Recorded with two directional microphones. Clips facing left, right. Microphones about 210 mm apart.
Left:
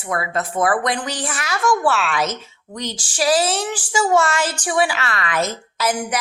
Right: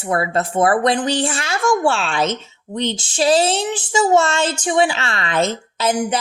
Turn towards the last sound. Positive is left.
turn(degrees=-25)  # may be behind; listen again after turning